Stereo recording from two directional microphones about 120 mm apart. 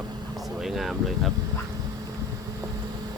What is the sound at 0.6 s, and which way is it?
Speech, centre (ahead or behind).